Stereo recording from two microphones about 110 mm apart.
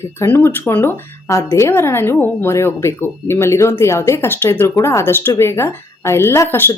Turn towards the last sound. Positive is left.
turn(degrees=20)  # may be behind; listen again after turning